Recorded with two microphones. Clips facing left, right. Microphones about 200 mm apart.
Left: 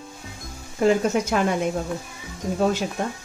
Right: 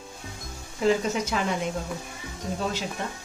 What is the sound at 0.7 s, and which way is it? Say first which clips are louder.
Speech: left 4 dB; 55° left (ahead or behind).